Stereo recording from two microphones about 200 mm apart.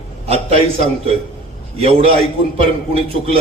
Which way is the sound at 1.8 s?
30° right (ahead or behind).